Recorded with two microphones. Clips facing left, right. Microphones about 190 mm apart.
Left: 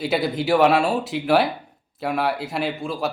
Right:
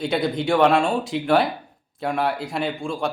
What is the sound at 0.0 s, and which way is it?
Speech, 5° left (ahead or behind).